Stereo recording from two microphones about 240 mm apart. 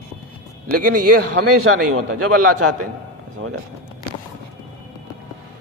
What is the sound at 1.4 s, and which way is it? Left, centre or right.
A man's voice, right.